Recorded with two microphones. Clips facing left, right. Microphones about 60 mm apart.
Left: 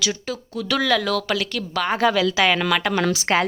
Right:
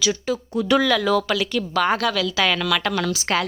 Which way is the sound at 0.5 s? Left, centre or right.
Right.